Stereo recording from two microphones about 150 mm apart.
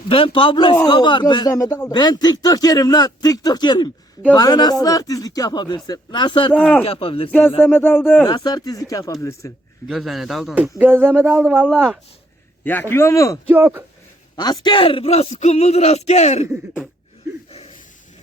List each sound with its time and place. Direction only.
0.1 s a man's voice: 35° left (ahead or behind)
6.5 s speech: 10° left (ahead or behind)
6.8 s a man's voice: 35° left (ahead or behind)
7.3 s speech: 10° left (ahead or behind)
8.3 s speech: 25° left (ahead or behind)
9.8 s speech: centre (ahead or behind)
12.6 s speech: 15° left (ahead or behind)
13.5 s speech: 15° right (ahead or behind)
14.3 s speech: 30° left (ahead or behind); by 16.5 s 45° left (ahead or behind)